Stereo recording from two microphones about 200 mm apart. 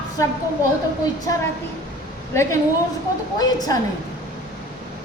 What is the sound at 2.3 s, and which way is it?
Speech, 15° left (ahead or behind).